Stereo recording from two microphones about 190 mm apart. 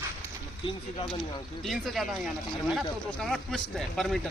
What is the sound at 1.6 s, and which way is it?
Speech, centre (ahead or behind).